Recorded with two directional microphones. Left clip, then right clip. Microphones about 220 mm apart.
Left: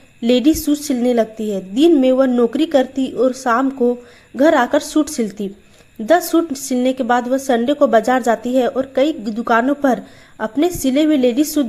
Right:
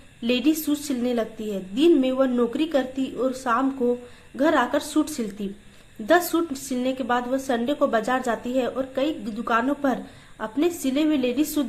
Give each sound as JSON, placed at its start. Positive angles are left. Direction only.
{"t": 0.2, "sound": "a woman's voice", "side_deg": 35}